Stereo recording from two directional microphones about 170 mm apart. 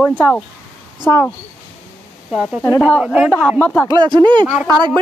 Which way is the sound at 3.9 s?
25° right (ahead or behind).